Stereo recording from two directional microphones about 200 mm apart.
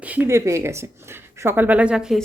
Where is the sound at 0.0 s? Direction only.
10° right (ahead or behind).